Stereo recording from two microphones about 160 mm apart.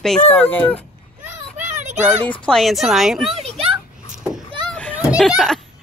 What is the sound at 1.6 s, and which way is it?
Children playing, 50° right (ahead or behind).